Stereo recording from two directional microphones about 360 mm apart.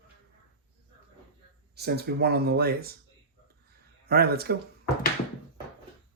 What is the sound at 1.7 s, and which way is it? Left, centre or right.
Speech, right.